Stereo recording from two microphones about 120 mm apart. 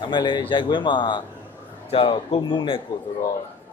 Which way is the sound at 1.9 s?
55° left (ahead or behind).